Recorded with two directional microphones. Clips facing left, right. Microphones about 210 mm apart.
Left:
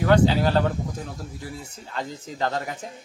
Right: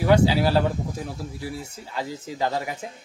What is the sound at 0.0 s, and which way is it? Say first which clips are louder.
A man's voice: even; 10° right (ahead or behind).